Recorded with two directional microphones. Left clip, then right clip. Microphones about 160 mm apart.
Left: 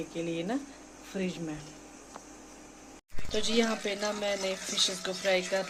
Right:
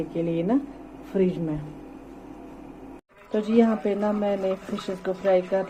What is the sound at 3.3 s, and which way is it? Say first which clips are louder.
Speech: right 7 dB; centre (ahead or behind).